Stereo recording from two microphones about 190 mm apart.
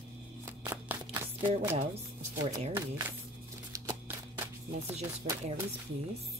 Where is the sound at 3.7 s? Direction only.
15° right (ahead or behind).